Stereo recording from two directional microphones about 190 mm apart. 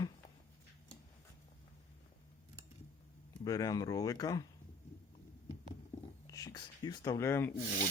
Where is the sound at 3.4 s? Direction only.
20° left (ahead or behind).